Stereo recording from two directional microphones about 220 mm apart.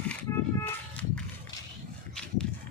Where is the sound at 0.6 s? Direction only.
5° left (ahead or behind).